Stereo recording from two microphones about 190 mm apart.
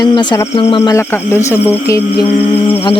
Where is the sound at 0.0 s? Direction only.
25° left (ahead or behind).